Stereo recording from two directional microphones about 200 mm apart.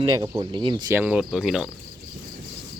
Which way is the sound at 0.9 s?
5° right (ahead or behind).